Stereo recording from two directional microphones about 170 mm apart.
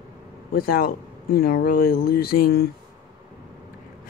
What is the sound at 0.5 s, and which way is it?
Speech, 60° left (ahead or behind).